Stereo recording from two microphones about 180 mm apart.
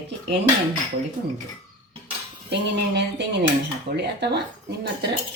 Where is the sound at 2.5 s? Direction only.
75° right (ahead or behind).